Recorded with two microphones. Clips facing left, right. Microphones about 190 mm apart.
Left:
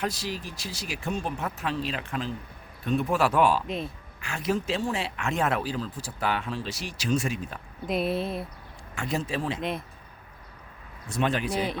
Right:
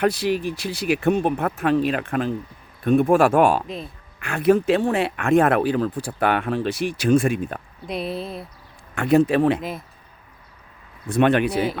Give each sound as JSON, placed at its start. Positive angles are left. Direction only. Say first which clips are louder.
{"t": 0.0, "sound": "speech", "louder": "right 11 dB", "side_deg": -60}
{"t": 7.9, "sound": "speech", "louder": "left 1 dB", "side_deg": 0}
{"t": 9.0, "sound": "speech", "louder": "right 13 dB", "side_deg": -60}
{"t": 9.6, "sound": "speech", "louder": "even", "side_deg": 0}
{"t": 11.0, "sound": "speech", "louder": "right 9 dB", "side_deg": -60}